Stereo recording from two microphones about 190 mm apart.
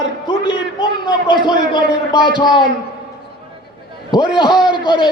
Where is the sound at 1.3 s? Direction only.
25° left (ahead or behind).